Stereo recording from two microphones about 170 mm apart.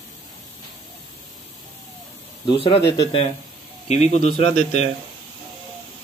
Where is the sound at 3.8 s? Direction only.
40° left (ahead or behind).